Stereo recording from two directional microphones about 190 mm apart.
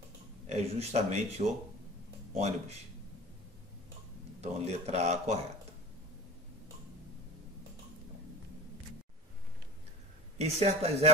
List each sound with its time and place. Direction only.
0.5 s speech: 35° right (ahead or behind)
4.4 s speech: 35° right (ahead or behind)
10.3 s speech: 35° right (ahead or behind)